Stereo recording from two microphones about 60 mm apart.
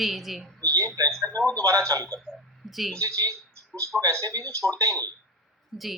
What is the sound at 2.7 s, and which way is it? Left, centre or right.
Speech, centre.